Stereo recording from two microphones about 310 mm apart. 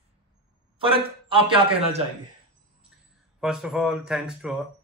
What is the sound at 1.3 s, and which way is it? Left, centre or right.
Speech, centre.